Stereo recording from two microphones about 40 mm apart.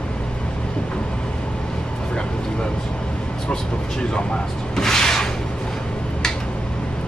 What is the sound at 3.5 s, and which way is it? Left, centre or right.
Speech, left.